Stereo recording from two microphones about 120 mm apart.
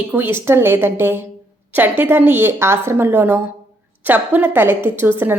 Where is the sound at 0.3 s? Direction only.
20° right (ahead or behind).